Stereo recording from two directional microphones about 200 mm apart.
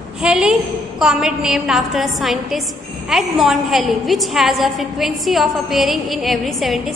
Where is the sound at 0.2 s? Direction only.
5° right (ahead or behind).